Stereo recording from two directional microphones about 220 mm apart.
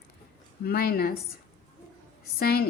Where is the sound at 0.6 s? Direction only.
45° left (ahead or behind).